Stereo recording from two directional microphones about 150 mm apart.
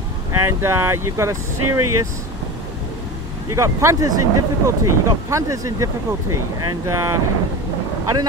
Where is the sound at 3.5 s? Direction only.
20° right (ahead or behind).